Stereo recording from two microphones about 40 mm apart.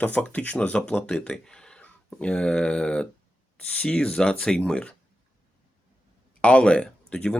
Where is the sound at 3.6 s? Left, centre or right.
Left.